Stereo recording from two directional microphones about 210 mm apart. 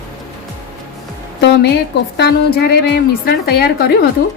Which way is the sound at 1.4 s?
55° left (ahead or behind).